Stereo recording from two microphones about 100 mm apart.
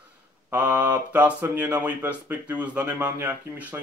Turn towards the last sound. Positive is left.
turn(degrees=-20)  # may be behind; listen again after turning